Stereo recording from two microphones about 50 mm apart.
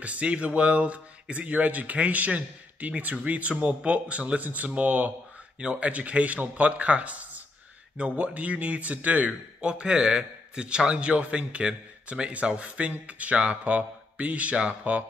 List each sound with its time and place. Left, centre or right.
0.0 s a man's voice: right
9.6 s a man's voice: centre